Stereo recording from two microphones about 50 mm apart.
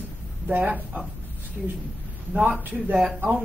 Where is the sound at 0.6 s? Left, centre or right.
Right.